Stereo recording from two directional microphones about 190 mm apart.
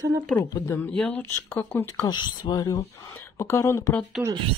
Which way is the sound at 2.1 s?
20° left (ahead or behind).